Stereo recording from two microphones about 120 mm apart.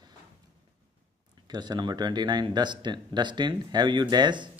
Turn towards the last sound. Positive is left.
turn(degrees=-40)  # may be behind; listen again after turning